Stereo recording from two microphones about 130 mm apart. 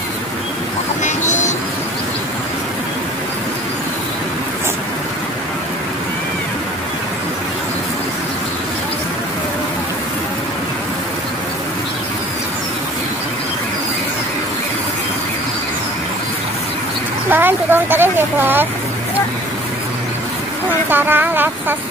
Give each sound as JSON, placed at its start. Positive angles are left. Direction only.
{"t": 1.0, "sound": "vehicle", "side_deg": 70}
{"t": 17.3, "sound": "a sound", "side_deg": -15}
{"t": 20.9, "sound": "speech", "side_deg": -15}